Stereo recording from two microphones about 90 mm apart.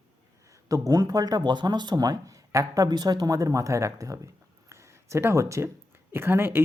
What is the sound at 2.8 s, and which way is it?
Speech, 55° right (ahead or behind).